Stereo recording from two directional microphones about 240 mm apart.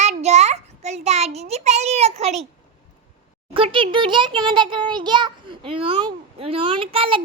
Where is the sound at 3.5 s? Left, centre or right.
Right.